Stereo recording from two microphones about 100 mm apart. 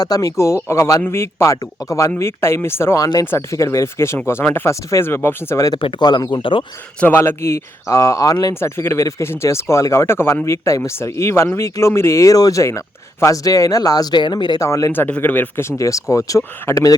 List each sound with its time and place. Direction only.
0.0 s speech: 35° left (ahead or behind)
5.8 s speech: 45° left (ahead or behind)
7.0 s speech: 20° left (ahead or behind); by 14.6 s 50° left (ahead or behind)
14.6 s speech: 35° left (ahead or behind)
14.9 s speech: 20° left (ahead or behind)
15.8 s speech: 30° left (ahead or behind)